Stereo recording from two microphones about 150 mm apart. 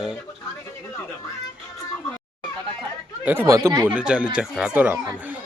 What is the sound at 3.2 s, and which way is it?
Speech, 15° right (ahead or behind).